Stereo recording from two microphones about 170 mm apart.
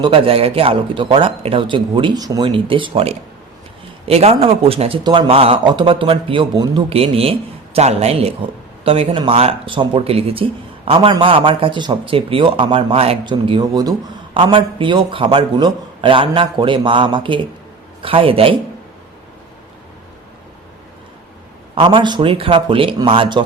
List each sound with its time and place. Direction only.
0.0 s a man's voice: 30° right (ahead or behind)
21.8 s a man's voice: 30° right (ahead or behind)